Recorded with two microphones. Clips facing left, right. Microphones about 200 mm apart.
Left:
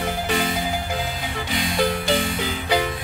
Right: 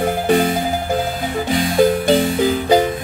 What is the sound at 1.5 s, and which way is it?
Music, 50° right (ahead or behind).